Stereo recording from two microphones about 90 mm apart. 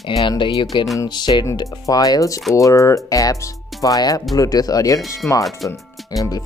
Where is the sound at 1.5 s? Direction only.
40° left (ahead or behind).